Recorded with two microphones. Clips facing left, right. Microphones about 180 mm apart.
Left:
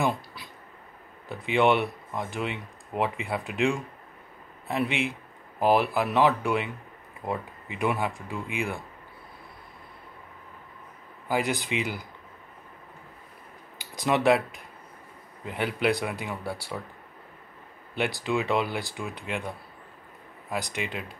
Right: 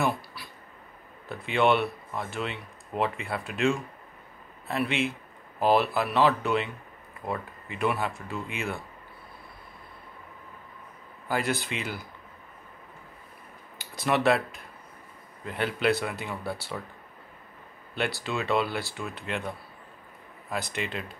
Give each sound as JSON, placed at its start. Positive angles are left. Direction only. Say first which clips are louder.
{"t": 0.0, "sound": "a sound", "louder": "left 1 dB", "side_deg": 20}
{"t": 1.3, "sound": "speech", "louder": "left 1 dB", "side_deg": 15}
{"t": 11.2, "sound": "speech", "louder": "left 1 dB", "side_deg": 15}
{"t": 13.7, "sound": "speech", "louder": "left 1 dB", "side_deg": 15}
{"t": 17.9, "sound": "speech", "louder": "left 3 dB", "side_deg": 15}